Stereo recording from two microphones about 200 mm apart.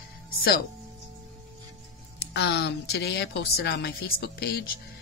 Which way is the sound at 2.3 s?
60° left (ahead or behind).